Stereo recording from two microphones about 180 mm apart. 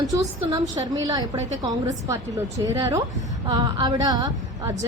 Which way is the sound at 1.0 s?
20° right (ahead or behind).